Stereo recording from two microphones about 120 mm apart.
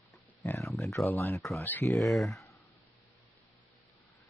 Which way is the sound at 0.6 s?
Centre (ahead or behind).